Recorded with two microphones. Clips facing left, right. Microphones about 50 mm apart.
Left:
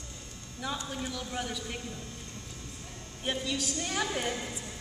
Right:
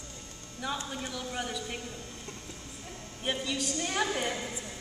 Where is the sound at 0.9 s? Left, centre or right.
Centre.